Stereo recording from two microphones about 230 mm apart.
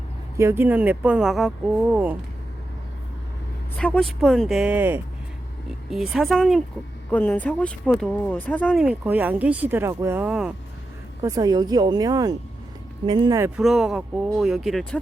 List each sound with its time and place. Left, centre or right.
0.3 s speech: centre
3.8 s speech: centre
11.2 s speech: centre
13.6 s speech: centre